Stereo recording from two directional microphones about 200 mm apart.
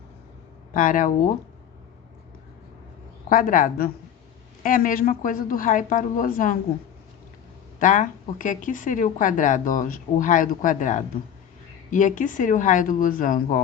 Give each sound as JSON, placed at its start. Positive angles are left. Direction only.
{"t": 0.7, "sound": "speech", "side_deg": 40}
{"t": 3.2, "sound": "a woman's voice", "side_deg": 45}
{"t": 7.8, "sound": "speech", "side_deg": 40}